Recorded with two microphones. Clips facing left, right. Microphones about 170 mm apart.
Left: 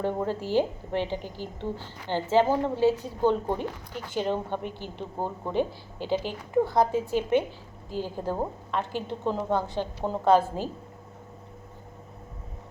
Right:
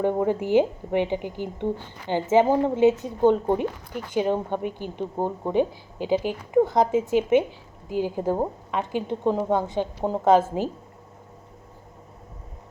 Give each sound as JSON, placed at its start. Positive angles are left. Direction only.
{"t": 0.0, "sound": "a woman's voice", "side_deg": -15}